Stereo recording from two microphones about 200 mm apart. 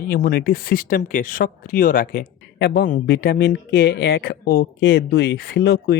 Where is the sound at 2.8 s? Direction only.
45° left (ahead or behind).